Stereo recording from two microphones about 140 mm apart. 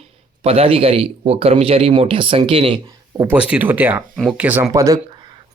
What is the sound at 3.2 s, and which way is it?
Speech, 10° right (ahead or behind).